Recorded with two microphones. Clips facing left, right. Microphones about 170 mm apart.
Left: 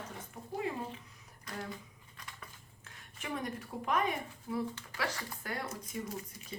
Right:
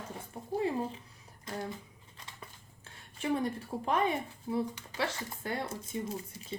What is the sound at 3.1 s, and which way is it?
Speech, 30° right (ahead or behind).